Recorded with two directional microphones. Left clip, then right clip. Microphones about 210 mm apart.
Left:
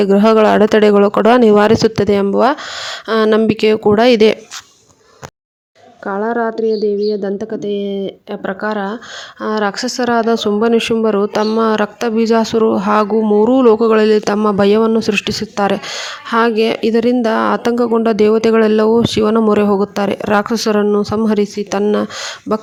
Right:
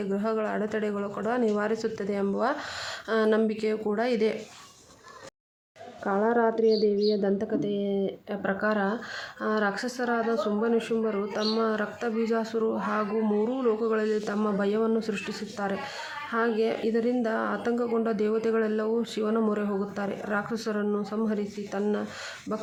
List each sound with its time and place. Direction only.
0.0 s speech: 45° left (ahead or behind)
6.1 s a woman's voice: 30° left (ahead or behind)